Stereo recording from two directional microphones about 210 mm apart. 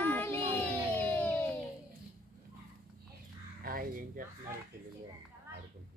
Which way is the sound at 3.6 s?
40° right (ahead or behind).